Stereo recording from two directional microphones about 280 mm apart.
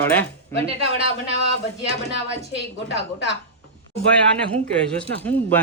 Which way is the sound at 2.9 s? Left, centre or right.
Left.